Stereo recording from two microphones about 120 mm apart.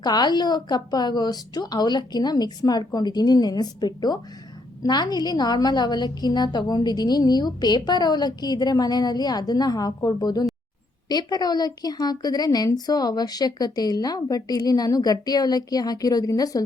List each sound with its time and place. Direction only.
0.0 s a woman's voice: 35° left (ahead or behind)